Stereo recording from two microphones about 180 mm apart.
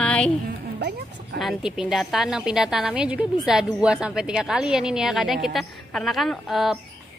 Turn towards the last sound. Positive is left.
turn(degrees=0)  # may be behind; listen again after turning